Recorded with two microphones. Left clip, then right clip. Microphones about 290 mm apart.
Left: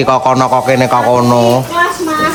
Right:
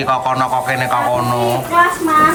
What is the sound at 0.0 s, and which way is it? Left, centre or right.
A man's voice, centre.